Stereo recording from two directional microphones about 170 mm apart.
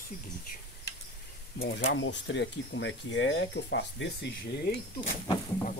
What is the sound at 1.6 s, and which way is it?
Speech, 90° left.